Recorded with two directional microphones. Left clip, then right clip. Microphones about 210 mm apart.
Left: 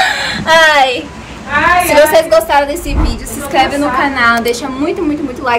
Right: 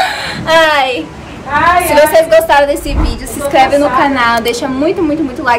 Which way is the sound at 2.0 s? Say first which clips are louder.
Right 2 dB; 5° right (ahead or behind).